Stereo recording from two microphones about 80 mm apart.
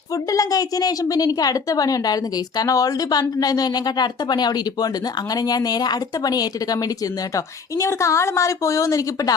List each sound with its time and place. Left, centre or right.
0.1 s a woman's voice: left